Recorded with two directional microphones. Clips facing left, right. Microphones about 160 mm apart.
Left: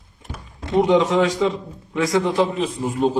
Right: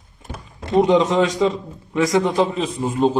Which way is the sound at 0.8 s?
20° right (ahead or behind).